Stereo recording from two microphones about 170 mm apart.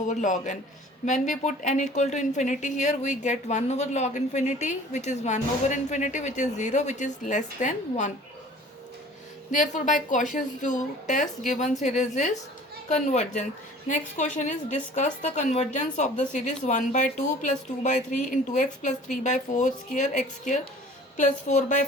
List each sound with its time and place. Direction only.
0.1 s speech: 45° left (ahead or behind)
9.5 s speech: 45° left (ahead or behind)